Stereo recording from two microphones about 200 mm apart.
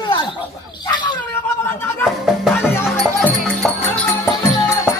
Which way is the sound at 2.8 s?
10° left (ahead or behind).